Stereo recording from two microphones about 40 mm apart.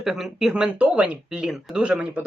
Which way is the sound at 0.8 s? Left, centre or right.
Right.